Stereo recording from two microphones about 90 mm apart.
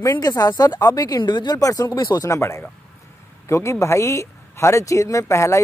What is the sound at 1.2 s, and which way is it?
Speech, 55° left (ahead or behind).